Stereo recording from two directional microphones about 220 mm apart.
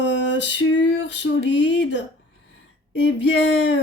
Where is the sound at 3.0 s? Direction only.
60° left (ahead or behind).